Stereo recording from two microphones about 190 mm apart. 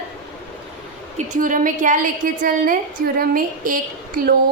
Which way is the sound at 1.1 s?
40° right (ahead or behind).